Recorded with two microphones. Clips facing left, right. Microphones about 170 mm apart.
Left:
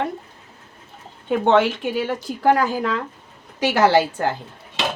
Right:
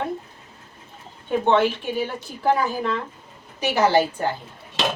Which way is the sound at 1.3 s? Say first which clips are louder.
Left 2 dB; 90° left.